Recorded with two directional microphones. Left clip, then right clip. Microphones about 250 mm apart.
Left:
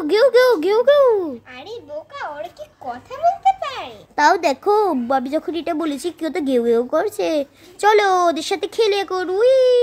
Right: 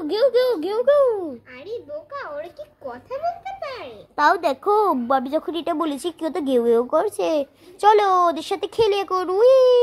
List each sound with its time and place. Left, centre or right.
0.0 s a child's voice: centre
3.7 s a child's voice: centre